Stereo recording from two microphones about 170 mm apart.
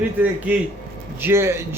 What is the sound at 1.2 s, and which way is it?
Speech, 15° right (ahead or behind).